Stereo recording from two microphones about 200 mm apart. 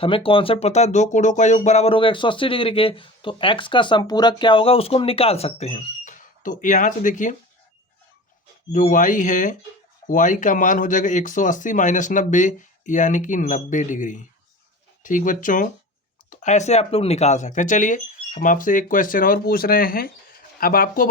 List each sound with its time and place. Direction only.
0.0 s speech: 25° left (ahead or behind)
8.7 s speech: 40° left (ahead or behind)